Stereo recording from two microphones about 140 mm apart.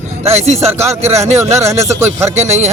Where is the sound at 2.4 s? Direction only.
50° right (ahead or behind).